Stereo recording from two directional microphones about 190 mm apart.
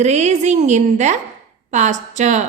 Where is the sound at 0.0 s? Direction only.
35° right (ahead or behind).